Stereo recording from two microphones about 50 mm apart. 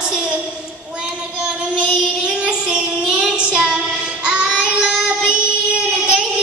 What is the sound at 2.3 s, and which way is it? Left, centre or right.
Child singing, centre.